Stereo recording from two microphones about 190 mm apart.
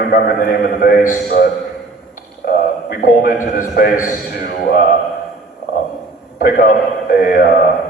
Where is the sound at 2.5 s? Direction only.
50° left (ahead or behind).